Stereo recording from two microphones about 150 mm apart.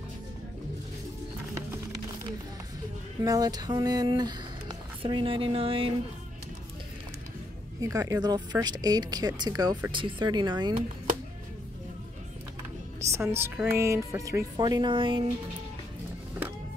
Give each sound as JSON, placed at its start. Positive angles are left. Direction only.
{"t": 3.2, "sound": "speech", "side_deg": -25}
{"t": 7.8, "sound": "a woman's voice", "side_deg": -20}
{"t": 13.0, "sound": "a woman's voice", "side_deg": -20}